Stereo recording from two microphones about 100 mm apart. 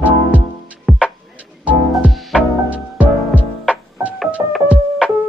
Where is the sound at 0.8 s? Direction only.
5° right (ahead or behind).